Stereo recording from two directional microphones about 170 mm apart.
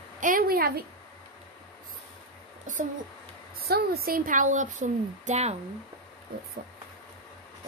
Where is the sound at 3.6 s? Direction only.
65° right (ahead or behind); by 5.6 s 40° right (ahead or behind).